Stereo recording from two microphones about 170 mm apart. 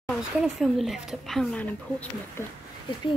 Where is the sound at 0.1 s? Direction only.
Centre (ahead or behind).